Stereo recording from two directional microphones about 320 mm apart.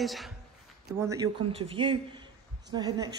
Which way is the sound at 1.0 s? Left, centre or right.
Centre.